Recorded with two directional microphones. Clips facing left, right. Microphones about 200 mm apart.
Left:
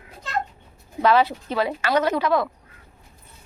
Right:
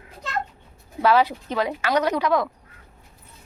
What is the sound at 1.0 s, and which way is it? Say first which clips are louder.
A woman's voice: even; 10° right (ahead or behind).